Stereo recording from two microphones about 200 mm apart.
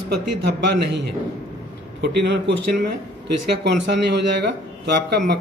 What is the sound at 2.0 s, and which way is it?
Speech, 60° right (ahead or behind).